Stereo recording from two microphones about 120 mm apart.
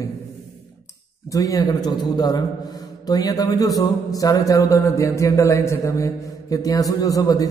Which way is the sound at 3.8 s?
30° left (ahead or behind).